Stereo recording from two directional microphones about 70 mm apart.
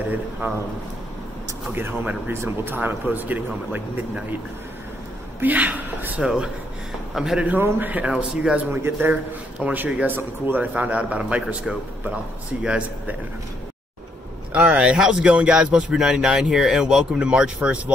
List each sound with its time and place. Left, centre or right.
1.8 s speech: right
5.4 s speech: right; by 7.4 s centre
7.4 s speech: right
8.0 s speech: centre
8.7 s speech: right
9.6 s speech: centre
14.5 s speech: centre